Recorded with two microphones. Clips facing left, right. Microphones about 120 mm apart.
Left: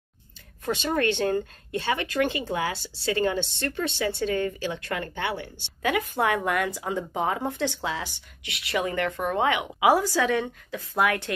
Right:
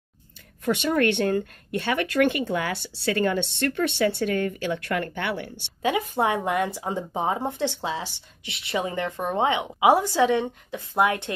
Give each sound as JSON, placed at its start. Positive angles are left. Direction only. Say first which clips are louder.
{"t": 0.9, "sound": "speech", "louder": "right 1 dB", "side_deg": -60}
{"t": 5.8, "sound": "speech", "louder": "right 2 dB", "side_deg": -25}